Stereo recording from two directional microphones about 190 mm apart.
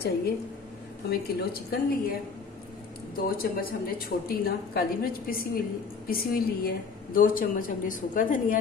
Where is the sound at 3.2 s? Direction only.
50° left (ahead or behind).